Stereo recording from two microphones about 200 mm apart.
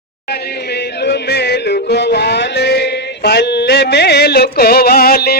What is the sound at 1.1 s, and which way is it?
Music, 55° left (ahead or behind).